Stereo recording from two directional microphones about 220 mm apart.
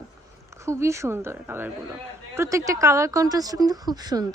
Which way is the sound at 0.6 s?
15° right (ahead or behind).